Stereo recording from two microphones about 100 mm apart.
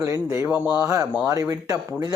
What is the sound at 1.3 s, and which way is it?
Speech, 35° right (ahead or behind).